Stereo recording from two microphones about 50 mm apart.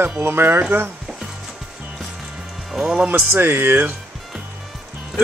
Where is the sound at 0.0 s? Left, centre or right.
Right.